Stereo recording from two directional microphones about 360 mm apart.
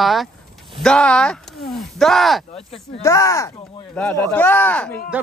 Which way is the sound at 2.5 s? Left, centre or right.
Centre.